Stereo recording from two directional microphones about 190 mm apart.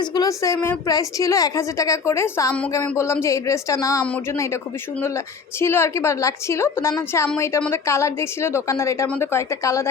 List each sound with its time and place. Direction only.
0.0 s a woman's voice: 20° left (ahead or behind)